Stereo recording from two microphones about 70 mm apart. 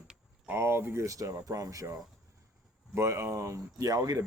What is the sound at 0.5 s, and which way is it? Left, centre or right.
Speech, right.